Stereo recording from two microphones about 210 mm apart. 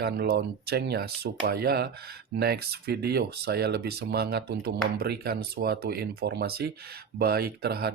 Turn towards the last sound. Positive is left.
turn(degrees=-50)  # may be behind; listen again after turning